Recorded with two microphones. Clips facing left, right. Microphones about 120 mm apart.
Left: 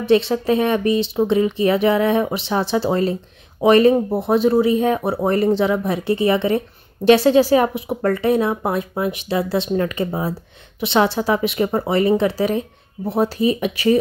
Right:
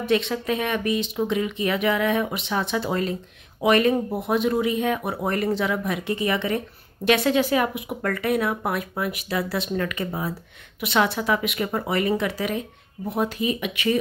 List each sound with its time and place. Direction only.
0.0 s a woman's voice: 30° left (ahead or behind)